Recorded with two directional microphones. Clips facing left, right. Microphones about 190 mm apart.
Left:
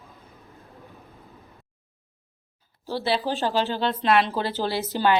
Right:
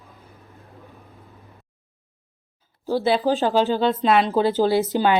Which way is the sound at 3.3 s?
45° right (ahead or behind).